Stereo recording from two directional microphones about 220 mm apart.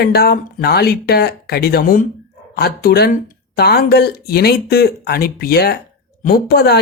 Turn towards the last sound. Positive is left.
turn(degrees=45)  # may be behind; listen again after turning